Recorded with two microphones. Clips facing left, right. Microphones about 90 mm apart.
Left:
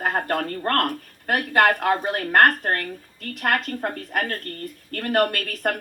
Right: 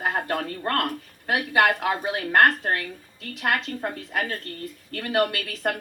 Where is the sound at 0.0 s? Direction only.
45° left (ahead or behind).